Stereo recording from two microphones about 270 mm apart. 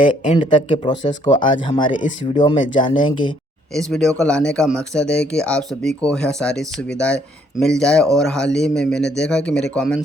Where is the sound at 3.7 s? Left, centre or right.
Centre.